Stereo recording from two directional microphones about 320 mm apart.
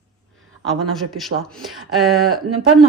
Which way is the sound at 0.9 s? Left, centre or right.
Centre.